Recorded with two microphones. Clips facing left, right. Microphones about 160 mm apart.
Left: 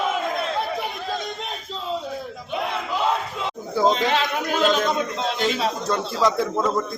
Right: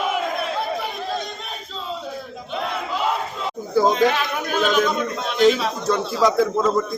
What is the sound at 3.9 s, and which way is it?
Speech, 25° left (ahead or behind).